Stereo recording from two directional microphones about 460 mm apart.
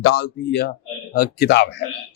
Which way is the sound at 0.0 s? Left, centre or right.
Left.